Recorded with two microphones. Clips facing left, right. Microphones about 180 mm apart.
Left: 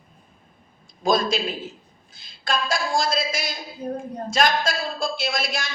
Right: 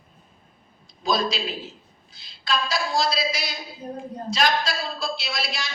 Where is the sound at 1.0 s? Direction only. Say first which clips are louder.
Left 3 dB; 50° left (ahead or behind).